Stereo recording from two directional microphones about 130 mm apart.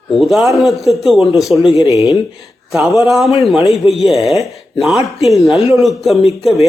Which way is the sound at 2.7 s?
Centre (ahead or behind).